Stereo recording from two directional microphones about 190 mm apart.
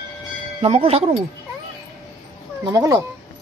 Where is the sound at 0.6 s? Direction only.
30° right (ahead or behind).